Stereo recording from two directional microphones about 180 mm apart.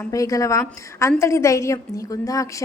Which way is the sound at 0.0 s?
20° left (ahead or behind).